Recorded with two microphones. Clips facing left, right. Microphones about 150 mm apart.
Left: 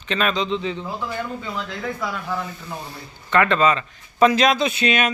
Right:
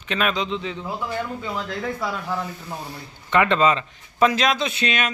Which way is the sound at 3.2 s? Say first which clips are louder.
Even; 15° right (ahead or behind).